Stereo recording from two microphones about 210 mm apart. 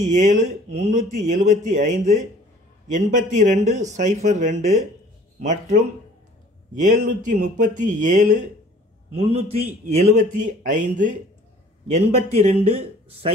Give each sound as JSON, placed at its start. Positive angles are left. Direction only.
{"t": 0.3, "sound": "a man's voice", "side_deg": -35}